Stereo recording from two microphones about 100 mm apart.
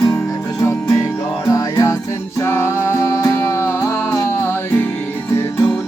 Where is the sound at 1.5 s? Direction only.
35° left (ahead or behind).